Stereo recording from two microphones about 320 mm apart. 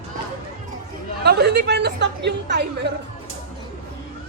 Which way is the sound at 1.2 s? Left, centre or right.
Right.